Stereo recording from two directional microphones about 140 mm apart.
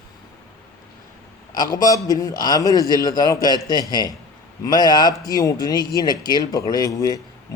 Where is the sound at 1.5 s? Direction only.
30° left (ahead or behind).